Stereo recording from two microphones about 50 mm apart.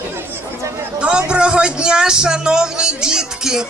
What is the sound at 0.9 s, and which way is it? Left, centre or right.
Speech, right.